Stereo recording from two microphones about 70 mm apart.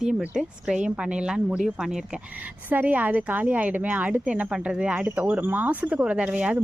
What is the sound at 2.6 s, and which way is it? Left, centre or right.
A woman's voice, right.